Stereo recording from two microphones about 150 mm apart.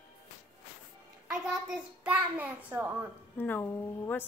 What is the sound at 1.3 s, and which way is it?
A child's voice, 5° right (ahead or behind).